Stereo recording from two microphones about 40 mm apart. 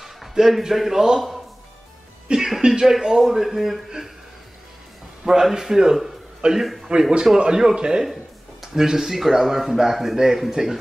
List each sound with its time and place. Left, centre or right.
0.0 s a man's voice: centre
2.3 s speech: centre
5.2 s speech: centre
6.6 s speech: centre
6.9 s speech: centre
8.0 s a sound: centre
8.8 s speech: centre